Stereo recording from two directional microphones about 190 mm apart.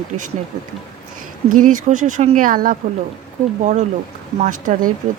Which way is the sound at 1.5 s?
40° right (ahead or behind).